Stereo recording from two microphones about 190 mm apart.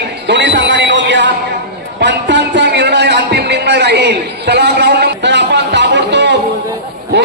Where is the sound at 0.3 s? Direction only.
70° right (ahead or behind).